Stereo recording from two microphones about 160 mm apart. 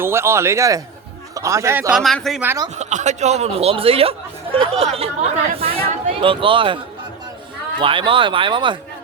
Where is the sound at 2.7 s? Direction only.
45° right (ahead or behind).